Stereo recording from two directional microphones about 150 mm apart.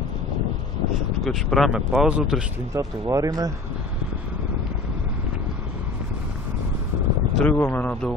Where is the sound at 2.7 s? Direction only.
20° right (ahead or behind).